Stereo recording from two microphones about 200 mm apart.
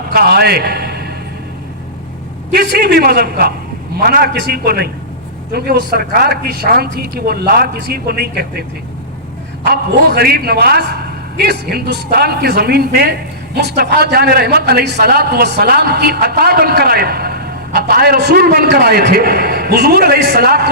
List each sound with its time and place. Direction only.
0.1 s a man's voice: 50° right (ahead or behind)
2.5 s speech: 50° right (ahead or behind)
9.6 s speech: 55° right (ahead or behind)